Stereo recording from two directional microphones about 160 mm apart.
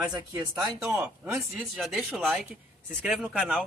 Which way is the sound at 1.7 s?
Centre (ahead or behind).